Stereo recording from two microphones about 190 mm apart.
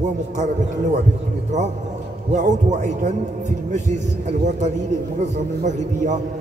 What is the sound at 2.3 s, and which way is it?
A man's voice, 40° right (ahead or behind).